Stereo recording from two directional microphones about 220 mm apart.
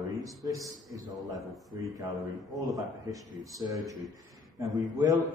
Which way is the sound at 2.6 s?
15° right (ahead or behind).